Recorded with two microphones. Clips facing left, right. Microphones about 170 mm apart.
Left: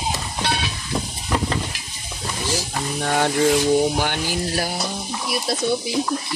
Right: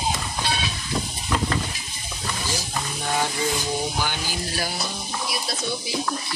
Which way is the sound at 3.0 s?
65° left (ahead or behind).